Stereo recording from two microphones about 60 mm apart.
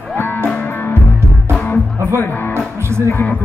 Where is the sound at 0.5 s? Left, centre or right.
Left.